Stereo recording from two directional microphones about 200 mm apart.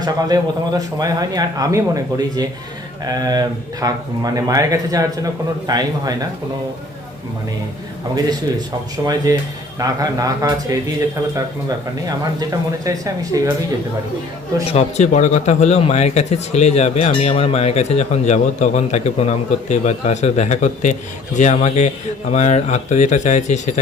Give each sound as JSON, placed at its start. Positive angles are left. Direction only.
{"t": 0.0, "sound": "speech", "side_deg": -20}
{"t": 9.3, "sound": "speech", "side_deg": -15}
{"t": 12.0, "sound": "speech", "side_deg": -20}
{"t": 14.7, "sound": "a man's voice", "side_deg": 35}